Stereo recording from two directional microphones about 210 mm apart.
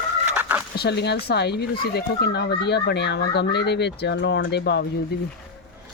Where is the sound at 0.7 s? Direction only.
50° left (ahead or behind).